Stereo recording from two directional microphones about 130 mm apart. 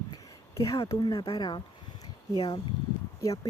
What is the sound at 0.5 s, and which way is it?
Speech, 25° left (ahead or behind).